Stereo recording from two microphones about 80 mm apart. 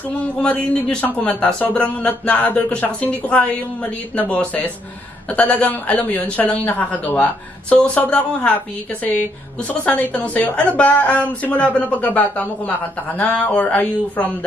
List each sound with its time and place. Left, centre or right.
0.4 s a man's voice: centre
9.7 s a woman's voice: left